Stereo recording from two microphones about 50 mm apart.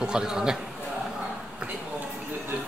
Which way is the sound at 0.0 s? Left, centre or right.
Centre.